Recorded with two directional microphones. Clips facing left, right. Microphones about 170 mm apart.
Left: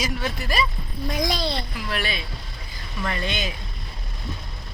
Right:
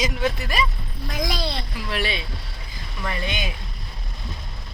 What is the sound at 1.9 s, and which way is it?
Speech, 25° right (ahead or behind).